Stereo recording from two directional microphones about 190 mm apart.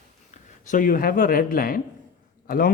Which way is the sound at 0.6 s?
45° left (ahead or behind).